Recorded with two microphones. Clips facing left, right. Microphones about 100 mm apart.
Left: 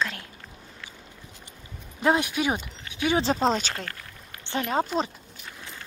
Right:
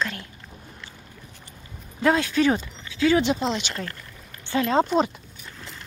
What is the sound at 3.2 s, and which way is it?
Speech, 40° left (ahead or behind).